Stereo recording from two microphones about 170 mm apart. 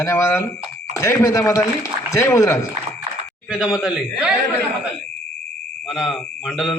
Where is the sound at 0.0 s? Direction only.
15° left (ahead or behind).